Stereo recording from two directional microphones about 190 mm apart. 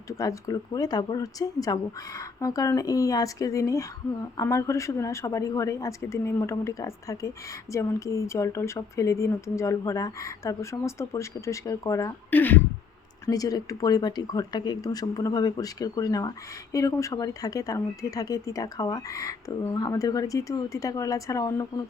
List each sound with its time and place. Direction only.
0.2 s a woman's voice: 20° left (ahead or behind)